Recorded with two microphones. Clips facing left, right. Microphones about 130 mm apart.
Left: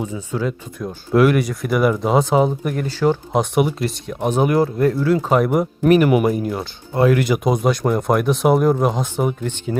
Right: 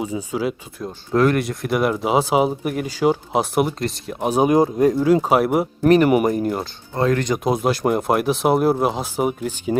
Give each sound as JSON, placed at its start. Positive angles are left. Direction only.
{"t": 0.0, "sound": "speech", "side_deg": -10}
{"t": 1.1, "sound": "speech", "side_deg": 10}
{"t": 4.4, "sound": "speech", "side_deg": -20}
{"t": 6.9, "sound": "speech", "side_deg": 10}